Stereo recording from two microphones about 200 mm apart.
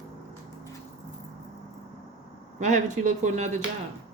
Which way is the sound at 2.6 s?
35° right (ahead or behind).